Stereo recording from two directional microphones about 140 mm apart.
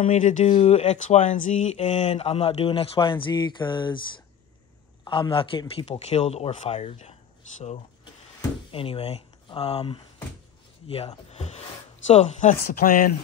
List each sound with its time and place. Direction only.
0.0 s speech: 65° left (ahead or behind)
0.5 s speech: 50° left (ahead or behind); by 4.0 s 35° left (ahead or behind)
5.0 s speech: 35° left (ahead or behind); by 7.8 s 50° left (ahead or behind)
8.0 s a sound: 40° left (ahead or behind)
10.9 s speech: 45° left (ahead or behind); by 13.1 s 90° left